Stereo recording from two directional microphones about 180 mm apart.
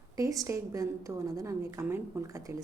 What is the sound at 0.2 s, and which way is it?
A woman's voice, 20° right (ahead or behind).